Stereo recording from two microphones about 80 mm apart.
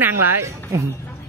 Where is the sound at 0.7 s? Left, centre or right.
Right.